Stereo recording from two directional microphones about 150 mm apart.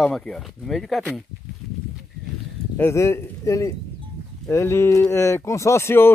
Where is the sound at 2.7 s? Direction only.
15° left (ahead or behind).